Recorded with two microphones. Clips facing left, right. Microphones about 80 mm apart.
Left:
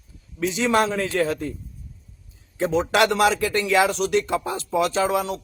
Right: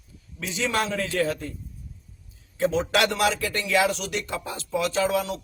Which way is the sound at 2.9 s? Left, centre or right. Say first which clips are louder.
Left 4 dB; left.